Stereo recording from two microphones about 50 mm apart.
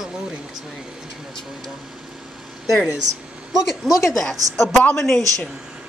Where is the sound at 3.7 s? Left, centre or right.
Centre.